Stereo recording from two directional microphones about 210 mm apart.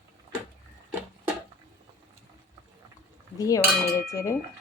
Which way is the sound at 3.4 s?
15° left (ahead or behind).